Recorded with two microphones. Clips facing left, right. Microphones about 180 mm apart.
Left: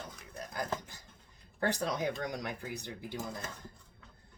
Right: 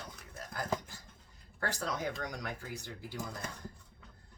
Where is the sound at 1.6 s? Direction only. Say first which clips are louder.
Left 4 dB; 20° left (ahead or behind).